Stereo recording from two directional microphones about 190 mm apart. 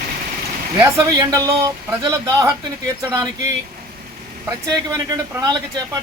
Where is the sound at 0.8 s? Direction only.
15° right (ahead or behind).